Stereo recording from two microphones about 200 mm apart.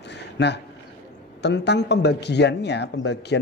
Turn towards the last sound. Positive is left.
turn(degrees=60)  # may be behind; listen again after turning